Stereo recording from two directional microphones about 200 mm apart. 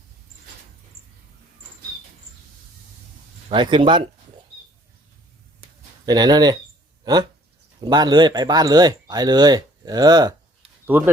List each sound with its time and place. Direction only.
3.5 s speech: 25° right (ahead or behind)
6.1 s speech: 20° right (ahead or behind)
10.8 s speech: 10° right (ahead or behind)